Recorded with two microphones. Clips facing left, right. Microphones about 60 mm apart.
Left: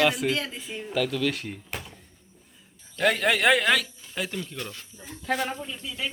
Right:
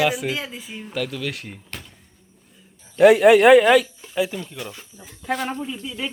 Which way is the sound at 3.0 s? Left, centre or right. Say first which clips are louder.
Right 11 dB; centre.